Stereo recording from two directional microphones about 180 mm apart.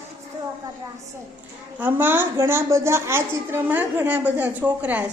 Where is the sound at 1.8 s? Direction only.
10° right (ahead or behind).